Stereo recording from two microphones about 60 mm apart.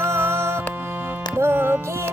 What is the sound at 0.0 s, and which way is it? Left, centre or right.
Music, right.